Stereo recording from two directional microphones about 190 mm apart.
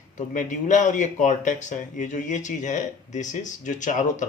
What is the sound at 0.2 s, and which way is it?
Speech, 40° left (ahead or behind).